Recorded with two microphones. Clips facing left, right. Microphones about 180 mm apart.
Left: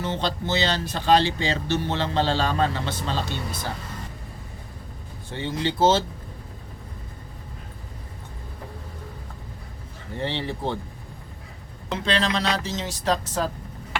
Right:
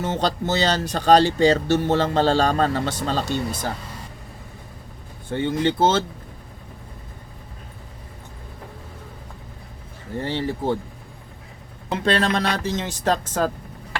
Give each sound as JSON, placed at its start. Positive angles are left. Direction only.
{"t": 0.0, "sound": "speech", "side_deg": -45}
{"t": 5.3, "sound": "speech", "side_deg": -55}
{"t": 10.2, "sound": "speech", "side_deg": -45}
{"t": 11.9, "sound": "speech", "side_deg": -50}